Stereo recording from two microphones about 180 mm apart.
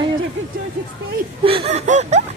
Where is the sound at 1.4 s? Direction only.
35° right (ahead or behind).